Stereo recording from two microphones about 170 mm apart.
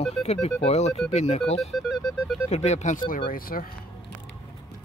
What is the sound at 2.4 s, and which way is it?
Speech, 40° left (ahead or behind).